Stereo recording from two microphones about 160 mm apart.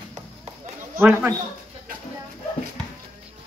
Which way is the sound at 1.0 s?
10° right (ahead or behind).